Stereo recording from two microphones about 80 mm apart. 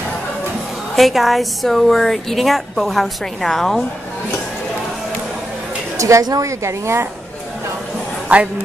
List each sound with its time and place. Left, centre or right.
0.9 s a woman's voice: centre
5.9 s a woman's voice: right
8.3 s a woman's voice: centre